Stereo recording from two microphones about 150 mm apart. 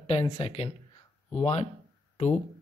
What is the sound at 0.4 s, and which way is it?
Speech, 40° left (ahead or behind).